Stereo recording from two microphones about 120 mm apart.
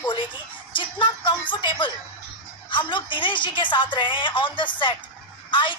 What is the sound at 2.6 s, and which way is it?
A woman's voice, 45° left (ahead or behind).